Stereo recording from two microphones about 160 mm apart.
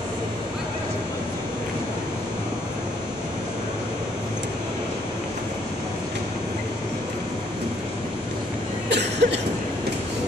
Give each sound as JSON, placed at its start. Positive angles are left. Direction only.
{"t": 8.8, "sound": "cough", "side_deg": -90}